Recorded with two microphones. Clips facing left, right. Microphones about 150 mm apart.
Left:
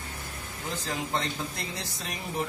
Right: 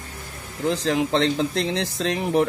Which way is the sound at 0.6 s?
90° right.